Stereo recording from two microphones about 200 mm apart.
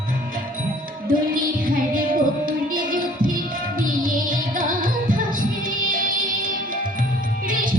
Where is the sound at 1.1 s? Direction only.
45° right (ahead or behind).